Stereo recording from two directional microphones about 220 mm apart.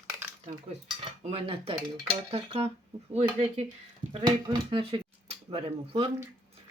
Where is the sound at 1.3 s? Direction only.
25° right (ahead or behind).